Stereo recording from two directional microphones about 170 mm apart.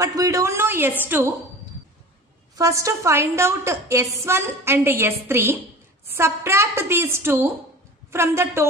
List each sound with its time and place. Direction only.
0.0 s a woman's voice: 20° right (ahead or behind)
2.5 s a woman's voice: 20° right (ahead or behind)